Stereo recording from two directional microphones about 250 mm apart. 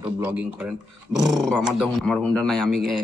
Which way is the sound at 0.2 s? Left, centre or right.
Centre.